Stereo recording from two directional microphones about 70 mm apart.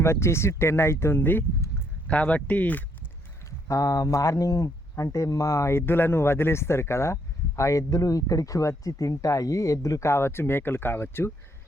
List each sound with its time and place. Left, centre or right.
0.0 s speech: left
3.7 s speech: left